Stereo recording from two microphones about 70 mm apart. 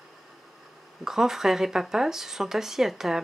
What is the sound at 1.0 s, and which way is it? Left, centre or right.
A woman's voice, centre.